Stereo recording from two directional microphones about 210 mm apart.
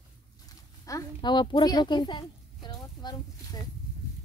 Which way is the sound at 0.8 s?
15° left (ahead or behind).